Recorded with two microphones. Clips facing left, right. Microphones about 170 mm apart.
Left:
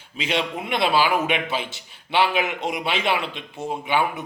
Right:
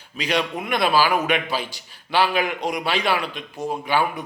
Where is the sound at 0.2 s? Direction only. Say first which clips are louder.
Right 1 dB; 25° left (ahead or behind).